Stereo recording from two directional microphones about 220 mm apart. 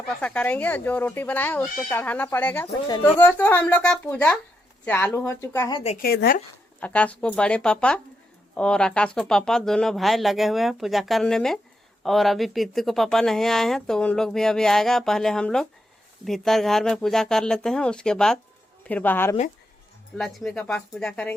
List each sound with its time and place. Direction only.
0.2 s speech: 5° left (ahead or behind); by 6.0 s 25° left (ahead or behind)
6.0 s speech: 45° left (ahead or behind)
6.7 s speech: 5° left (ahead or behind)